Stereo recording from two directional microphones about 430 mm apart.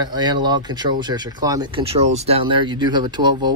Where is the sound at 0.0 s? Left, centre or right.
Centre.